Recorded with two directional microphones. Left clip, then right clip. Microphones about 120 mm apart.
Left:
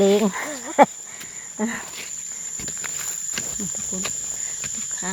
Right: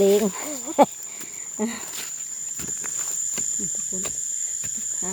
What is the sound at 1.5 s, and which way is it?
Speech, 20° right (ahead or behind).